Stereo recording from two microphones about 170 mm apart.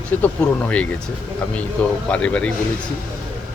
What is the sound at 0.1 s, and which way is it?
Speech, 10° left (ahead or behind).